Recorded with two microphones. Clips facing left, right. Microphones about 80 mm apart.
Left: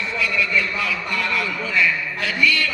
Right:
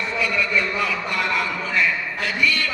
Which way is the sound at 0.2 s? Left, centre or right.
Right.